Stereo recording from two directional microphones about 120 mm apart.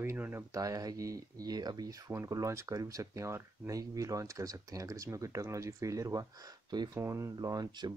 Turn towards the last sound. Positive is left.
turn(degrees=-35)  # may be behind; listen again after turning